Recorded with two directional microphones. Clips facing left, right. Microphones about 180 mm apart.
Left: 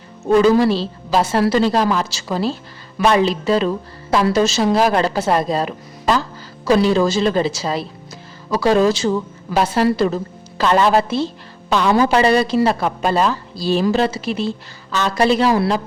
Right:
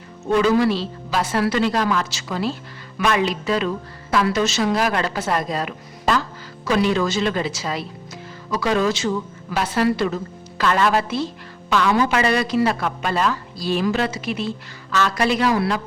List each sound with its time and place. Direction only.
0.3 s a woman's voice: 35° left (ahead or behind)